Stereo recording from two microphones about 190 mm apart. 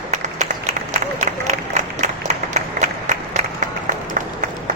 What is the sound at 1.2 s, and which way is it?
Applause, 40° right (ahead or behind).